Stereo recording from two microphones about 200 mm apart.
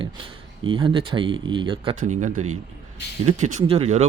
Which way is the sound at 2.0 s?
40° right (ahead or behind).